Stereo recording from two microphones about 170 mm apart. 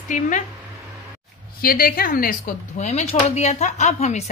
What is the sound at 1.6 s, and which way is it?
Speech, 60° left (ahead or behind).